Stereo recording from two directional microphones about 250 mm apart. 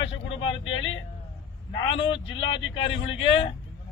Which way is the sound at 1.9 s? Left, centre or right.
Left.